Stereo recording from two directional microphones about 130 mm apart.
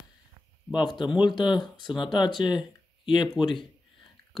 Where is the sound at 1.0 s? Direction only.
35° left (ahead or behind).